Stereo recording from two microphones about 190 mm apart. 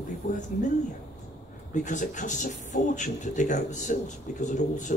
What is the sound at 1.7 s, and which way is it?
Speech, 40° left (ahead or behind).